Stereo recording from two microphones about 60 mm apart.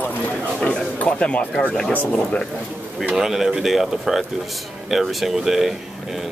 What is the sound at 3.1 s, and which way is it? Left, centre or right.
Speech, centre.